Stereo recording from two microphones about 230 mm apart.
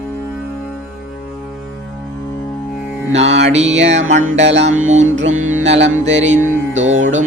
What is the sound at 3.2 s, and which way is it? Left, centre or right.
Music, right.